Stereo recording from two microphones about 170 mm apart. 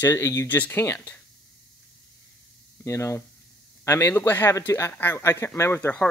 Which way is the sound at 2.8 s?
15° left (ahead or behind).